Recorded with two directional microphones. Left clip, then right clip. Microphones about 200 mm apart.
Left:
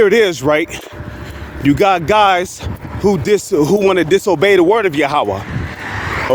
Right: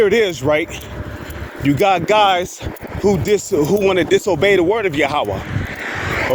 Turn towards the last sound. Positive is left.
turn(degrees=20)  # may be behind; listen again after turning